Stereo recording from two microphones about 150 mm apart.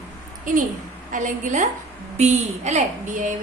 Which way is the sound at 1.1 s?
60° right (ahead or behind).